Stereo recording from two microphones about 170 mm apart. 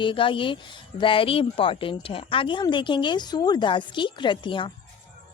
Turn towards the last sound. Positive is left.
turn(degrees=30)  # may be behind; listen again after turning